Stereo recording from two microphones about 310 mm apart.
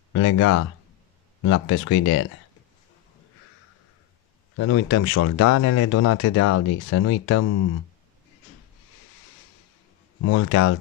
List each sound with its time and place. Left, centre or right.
0.1 s speech: left
4.6 s speech: left
10.2 s speech: left